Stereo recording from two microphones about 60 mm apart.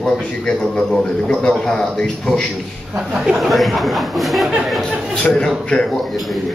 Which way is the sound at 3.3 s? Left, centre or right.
Centre.